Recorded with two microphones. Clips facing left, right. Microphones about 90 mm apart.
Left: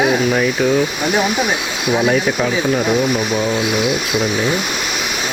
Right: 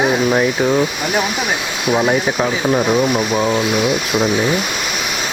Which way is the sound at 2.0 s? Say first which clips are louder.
Left 1 dB; 5° right (ahead or behind).